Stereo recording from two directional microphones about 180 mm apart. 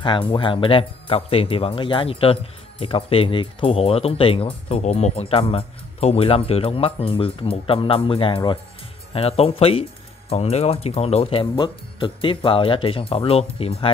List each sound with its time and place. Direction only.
0.0 s speech: 25° left (ahead or behind)